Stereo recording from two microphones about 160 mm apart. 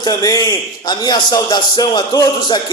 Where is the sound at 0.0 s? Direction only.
25° left (ahead or behind).